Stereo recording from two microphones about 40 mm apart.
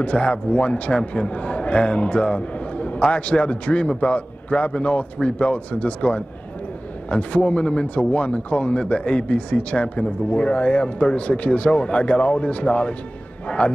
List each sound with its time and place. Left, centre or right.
0.0 s a man's voice: left